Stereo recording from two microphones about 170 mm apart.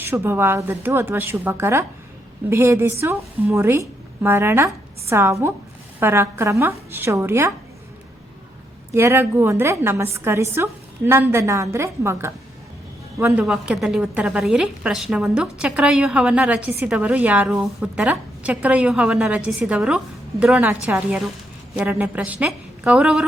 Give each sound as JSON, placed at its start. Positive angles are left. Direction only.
{"t": 0.0, "sound": "a woman's voice", "side_deg": -10}
{"t": 8.9, "sound": "a woman's voice", "side_deg": -15}
{"t": 13.4, "sound": "a woman's voice", "side_deg": 0}